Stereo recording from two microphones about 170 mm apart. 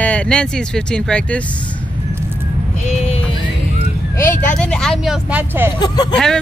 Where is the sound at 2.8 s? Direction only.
40° left (ahead or behind).